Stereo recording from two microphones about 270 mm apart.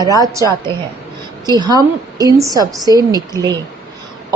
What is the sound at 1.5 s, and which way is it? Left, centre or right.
A woman's voice, centre.